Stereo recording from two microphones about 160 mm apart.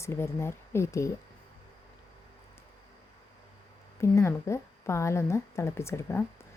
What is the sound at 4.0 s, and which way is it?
A woman's voice, 15° left (ahead or behind).